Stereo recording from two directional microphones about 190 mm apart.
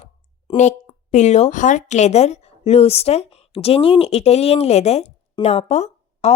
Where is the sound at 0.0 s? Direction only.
35° left (ahead or behind).